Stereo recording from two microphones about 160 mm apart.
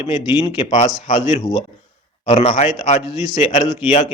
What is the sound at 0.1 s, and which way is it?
Speech, 35° left (ahead or behind).